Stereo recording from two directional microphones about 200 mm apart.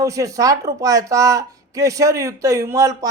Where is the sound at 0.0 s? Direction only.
15° right (ahead or behind).